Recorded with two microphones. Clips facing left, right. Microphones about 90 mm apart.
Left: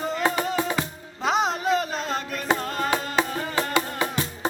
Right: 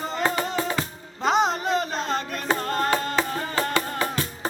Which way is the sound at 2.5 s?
Centre (ahead or behind).